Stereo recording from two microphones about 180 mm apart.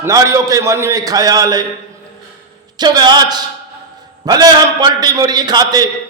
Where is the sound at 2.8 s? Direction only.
25° right (ahead or behind).